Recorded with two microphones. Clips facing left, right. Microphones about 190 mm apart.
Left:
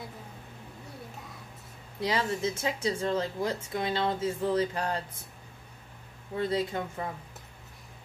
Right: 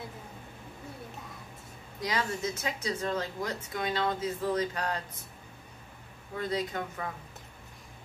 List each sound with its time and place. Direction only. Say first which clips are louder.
2.0 s speech: left 3 dB; 30° left (ahead or behind)
6.3 s speech: left 3 dB; 30° left (ahead or behind)